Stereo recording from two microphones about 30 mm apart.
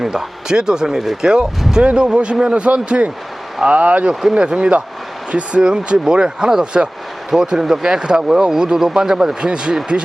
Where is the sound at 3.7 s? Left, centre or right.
Right.